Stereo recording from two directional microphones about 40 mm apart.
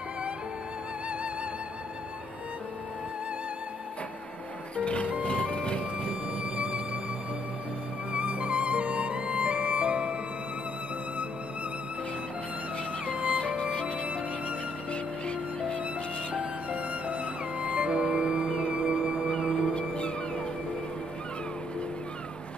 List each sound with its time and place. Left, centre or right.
4.7 s music: left
8.1 s music: right
13.0 s music: left
16.7 s music: right
19.2 s music: left